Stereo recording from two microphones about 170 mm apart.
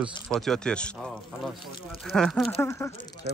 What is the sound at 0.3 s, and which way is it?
Speech, 5° left (ahead or behind).